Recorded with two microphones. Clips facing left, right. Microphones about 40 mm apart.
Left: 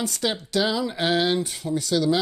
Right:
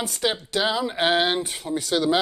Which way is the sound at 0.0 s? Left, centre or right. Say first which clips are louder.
Right 1 dB; right.